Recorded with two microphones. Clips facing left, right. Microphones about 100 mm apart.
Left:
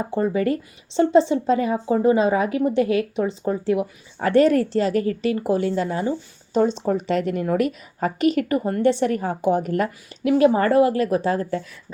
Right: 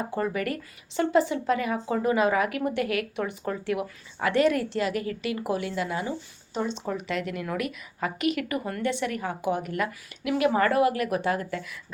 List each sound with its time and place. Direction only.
0.0 s a woman's voice: 25° left (ahead or behind)
4.2 s a woman's voice: 35° left (ahead or behind)